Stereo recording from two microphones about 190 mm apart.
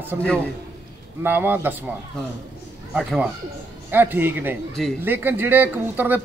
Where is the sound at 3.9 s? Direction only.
10° right (ahead or behind).